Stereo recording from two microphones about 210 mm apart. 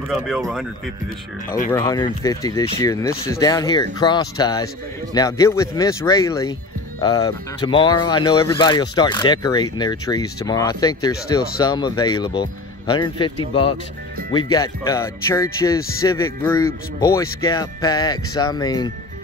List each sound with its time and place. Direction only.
1.7 s speech: 15° left (ahead or behind)